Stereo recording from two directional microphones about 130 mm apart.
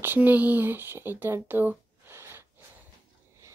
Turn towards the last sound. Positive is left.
turn(degrees=-20)  # may be behind; listen again after turning